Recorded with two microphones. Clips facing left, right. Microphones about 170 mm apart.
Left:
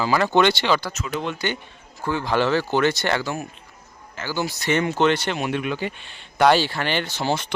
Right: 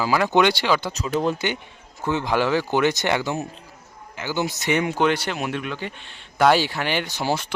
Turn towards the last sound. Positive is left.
turn(degrees=-5)  # may be behind; listen again after turning